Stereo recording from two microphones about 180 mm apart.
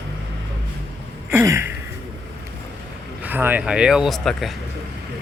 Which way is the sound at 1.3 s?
15° right (ahead or behind).